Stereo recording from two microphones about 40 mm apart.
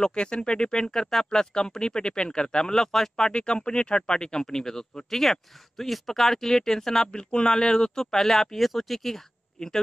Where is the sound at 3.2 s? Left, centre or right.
Left.